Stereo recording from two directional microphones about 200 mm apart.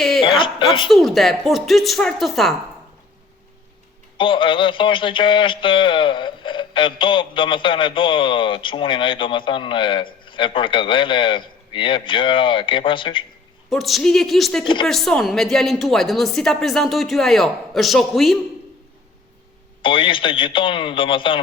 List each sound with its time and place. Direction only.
0.2 s speech: 25° left (ahead or behind)
0.9 s a woman's voice: centre (ahead or behind)
4.2 s a man's voice: 25° left (ahead or behind)
13.7 s a woman's voice: centre (ahead or behind)
19.8 s a man's voice: 25° left (ahead or behind)